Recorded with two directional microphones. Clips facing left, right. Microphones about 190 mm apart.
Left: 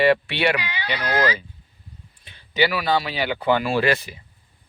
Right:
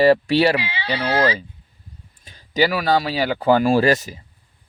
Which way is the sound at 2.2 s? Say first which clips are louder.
Right 3 dB; 40° right (ahead or behind).